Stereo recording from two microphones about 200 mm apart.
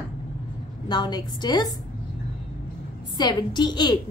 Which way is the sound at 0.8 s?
20° left (ahead or behind).